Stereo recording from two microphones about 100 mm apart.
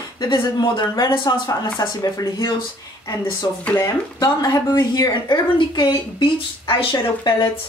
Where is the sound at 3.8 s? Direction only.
40° left (ahead or behind); by 7.6 s 65° left (ahead or behind).